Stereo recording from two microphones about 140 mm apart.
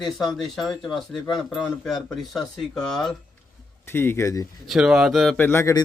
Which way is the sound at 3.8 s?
15° left (ahead or behind).